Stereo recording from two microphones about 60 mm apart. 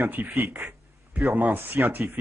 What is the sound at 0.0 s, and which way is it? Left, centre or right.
A man's voice, right.